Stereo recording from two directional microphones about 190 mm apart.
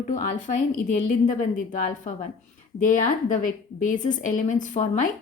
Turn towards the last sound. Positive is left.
turn(degrees=40)  # may be behind; listen again after turning